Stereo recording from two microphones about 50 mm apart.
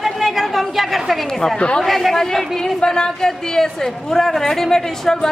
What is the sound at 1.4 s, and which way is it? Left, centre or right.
Speech, centre.